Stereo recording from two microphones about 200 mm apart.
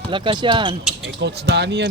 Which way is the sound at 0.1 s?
25° right (ahead or behind).